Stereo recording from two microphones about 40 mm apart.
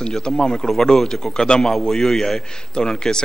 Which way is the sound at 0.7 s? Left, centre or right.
Centre.